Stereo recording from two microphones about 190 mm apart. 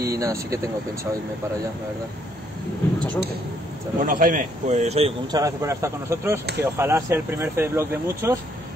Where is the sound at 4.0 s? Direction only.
45° right (ahead or behind).